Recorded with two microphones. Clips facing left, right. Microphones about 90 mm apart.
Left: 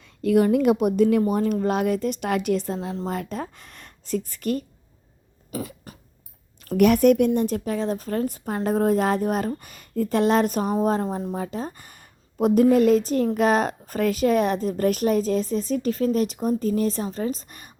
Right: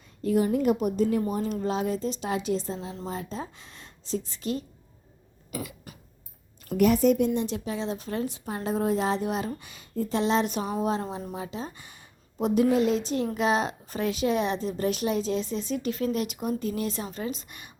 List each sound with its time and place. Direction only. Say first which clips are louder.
0.0 s a woman's voice: left 5 dB; 75° left (ahead or behind)
1.3 s speech: left 6 dB; 60° left (ahead or behind)
5.5 s throat clearing: left 4 dB; 35° left (ahead or behind)
6.7 s speech: left 5 dB; 75° left (ahead or behind)
7.3 s speech: left 5 dB; 50° left (ahead or behind)